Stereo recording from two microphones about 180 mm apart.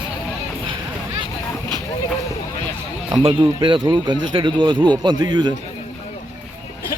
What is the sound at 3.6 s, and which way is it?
Speech, 25° right (ahead or behind).